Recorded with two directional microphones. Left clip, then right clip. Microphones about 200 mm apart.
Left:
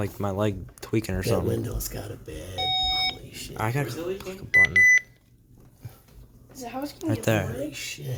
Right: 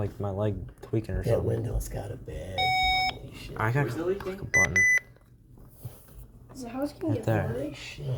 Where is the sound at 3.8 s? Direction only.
Centre (ahead or behind).